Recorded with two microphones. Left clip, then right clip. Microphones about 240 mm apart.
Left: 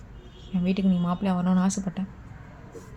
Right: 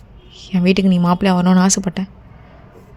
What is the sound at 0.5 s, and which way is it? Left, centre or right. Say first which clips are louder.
A woman's voice: right 11 dB; right.